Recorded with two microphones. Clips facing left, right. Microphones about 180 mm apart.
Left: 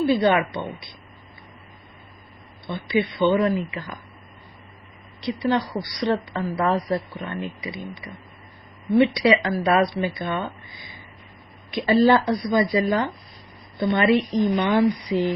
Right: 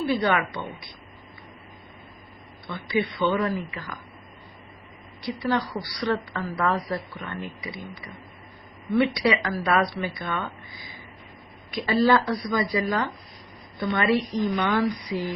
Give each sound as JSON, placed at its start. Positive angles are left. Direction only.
{"t": 0.1, "sound": "a woman's voice", "side_deg": 25}
{"t": 2.6, "sound": "a woman's voice", "side_deg": 20}
{"t": 5.2, "sound": "a woman's voice", "side_deg": 20}
{"t": 9.0, "sound": "a woman's voice", "side_deg": 20}
{"t": 11.7, "sound": "a woman's voice", "side_deg": 25}